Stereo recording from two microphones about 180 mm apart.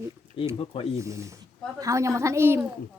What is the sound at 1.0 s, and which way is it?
Speech, 15° right (ahead or behind).